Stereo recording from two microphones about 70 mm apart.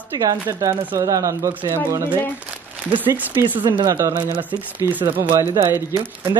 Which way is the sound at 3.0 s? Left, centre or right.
Right.